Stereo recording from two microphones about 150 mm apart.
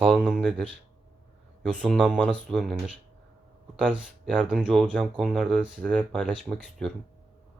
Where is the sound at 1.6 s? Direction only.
5° left (ahead or behind).